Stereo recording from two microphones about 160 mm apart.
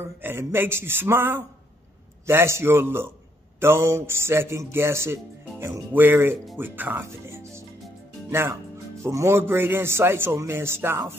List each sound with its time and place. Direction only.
0.2 s a man's voice: 15° right (ahead or behind)